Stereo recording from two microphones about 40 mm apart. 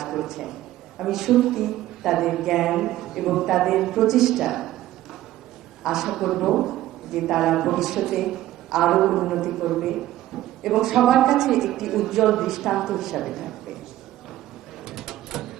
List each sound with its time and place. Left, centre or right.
0.0 s a man's voice: centre
5.8 s a man's voice: centre
14.8 s mechanisms: centre